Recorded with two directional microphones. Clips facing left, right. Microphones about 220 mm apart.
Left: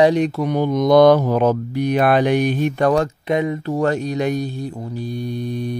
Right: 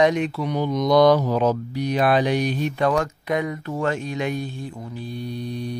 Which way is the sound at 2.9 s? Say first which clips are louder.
Left 4 dB; 30° left (ahead or behind).